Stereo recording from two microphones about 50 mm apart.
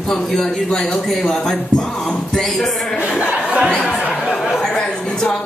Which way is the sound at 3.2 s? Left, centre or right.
Right.